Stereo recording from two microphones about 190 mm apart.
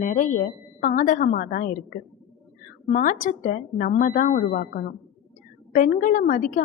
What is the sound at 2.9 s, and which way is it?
A woman's voice, 45° left (ahead or behind).